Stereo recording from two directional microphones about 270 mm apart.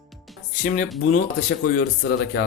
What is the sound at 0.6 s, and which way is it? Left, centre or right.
Speech, left.